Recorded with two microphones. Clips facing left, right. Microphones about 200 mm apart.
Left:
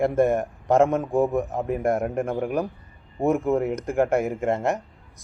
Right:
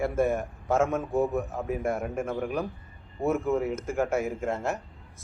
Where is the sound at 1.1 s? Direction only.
50° left (ahead or behind).